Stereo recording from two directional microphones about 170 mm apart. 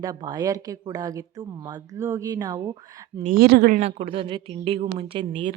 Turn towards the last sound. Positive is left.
turn(degrees=-30)  # may be behind; listen again after turning